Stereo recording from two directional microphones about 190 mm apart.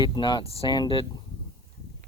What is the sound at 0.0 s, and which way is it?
Speech, 25° left (ahead or behind).